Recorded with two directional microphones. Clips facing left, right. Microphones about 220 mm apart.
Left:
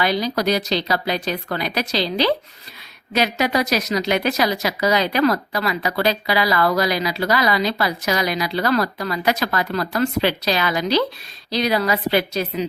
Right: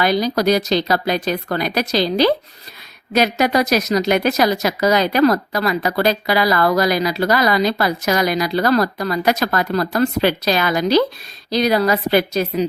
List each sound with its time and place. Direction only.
0.0 s speech: 45° right (ahead or behind)